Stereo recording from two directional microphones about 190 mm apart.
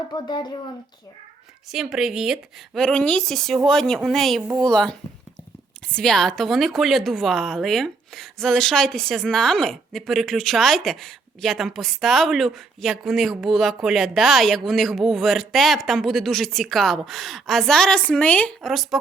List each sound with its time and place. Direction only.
0.1 s speech: 20° left (ahead or behind)
1.7 s a woman's voice: centre (ahead or behind)